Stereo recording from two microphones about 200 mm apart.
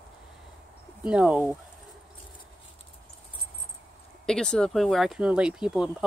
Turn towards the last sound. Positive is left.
turn(degrees=-5)  # may be behind; listen again after turning